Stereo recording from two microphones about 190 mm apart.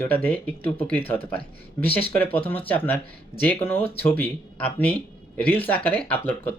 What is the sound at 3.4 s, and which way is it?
Speech, 10° left (ahead or behind).